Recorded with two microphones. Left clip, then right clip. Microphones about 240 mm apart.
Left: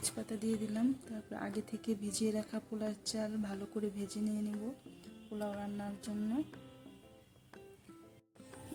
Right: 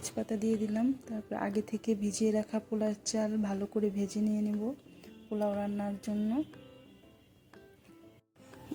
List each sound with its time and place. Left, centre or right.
0.0 s speech: centre